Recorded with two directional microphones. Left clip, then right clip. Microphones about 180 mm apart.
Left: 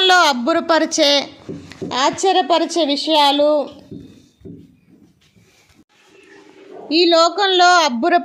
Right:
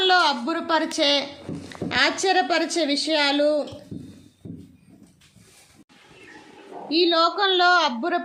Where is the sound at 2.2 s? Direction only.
5° left (ahead or behind).